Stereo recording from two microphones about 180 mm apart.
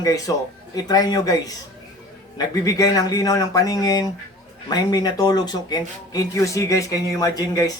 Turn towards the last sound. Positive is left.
turn(degrees=20)  # may be behind; listen again after turning